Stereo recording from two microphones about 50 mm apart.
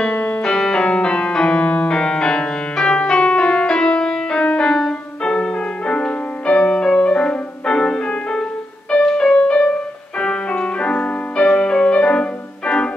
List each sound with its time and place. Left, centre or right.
0.0 s music: left
0.4 s music: centre